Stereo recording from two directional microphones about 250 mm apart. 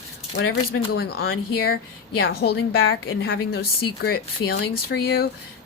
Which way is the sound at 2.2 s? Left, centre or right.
Left.